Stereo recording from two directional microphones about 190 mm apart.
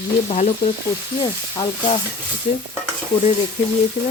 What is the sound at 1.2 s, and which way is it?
Speech, 25° left (ahead or behind).